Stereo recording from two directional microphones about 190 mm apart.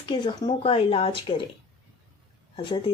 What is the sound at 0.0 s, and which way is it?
Speech, 25° left (ahead or behind).